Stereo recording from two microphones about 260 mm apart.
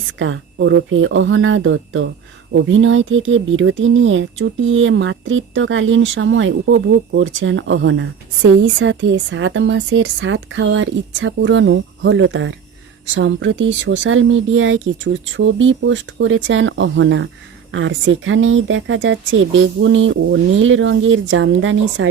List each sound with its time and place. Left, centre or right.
0.2 s speech: right